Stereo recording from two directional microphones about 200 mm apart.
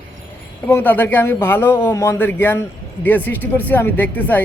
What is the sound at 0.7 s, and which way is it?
A man's voice, 10° left (ahead or behind).